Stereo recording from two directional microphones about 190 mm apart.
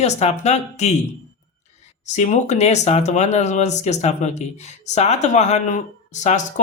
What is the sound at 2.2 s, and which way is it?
Speech, 35° left (ahead or behind).